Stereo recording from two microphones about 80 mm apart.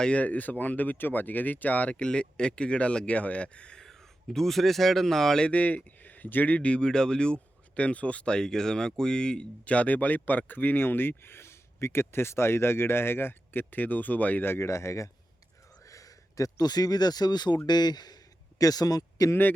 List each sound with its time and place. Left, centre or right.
0.0 s speech: centre; by 19.3 s left